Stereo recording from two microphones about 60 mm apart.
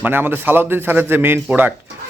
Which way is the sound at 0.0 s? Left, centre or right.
Right.